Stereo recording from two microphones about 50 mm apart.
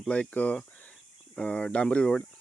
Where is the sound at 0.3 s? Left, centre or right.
Left.